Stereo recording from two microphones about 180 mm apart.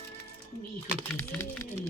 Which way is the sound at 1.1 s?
15° left (ahead or behind).